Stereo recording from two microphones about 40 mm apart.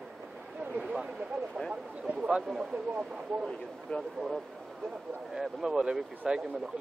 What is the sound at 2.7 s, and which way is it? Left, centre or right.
Speech, right.